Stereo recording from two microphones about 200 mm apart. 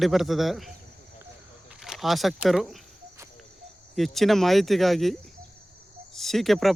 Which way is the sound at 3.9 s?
Centre (ahead or behind).